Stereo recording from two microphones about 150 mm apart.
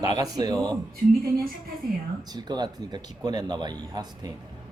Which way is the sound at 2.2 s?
25° right (ahead or behind).